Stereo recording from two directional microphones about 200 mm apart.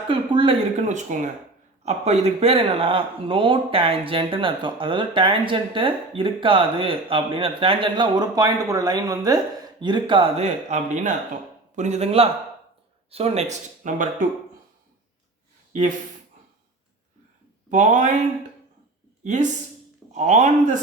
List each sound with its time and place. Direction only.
0.1 s speech: 25° right (ahead or behind)
0.9 s speech: 35° right (ahead or behind)
17.7 s speech: 40° right (ahead or behind)
19.2 s speech: 35° right (ahead or behind)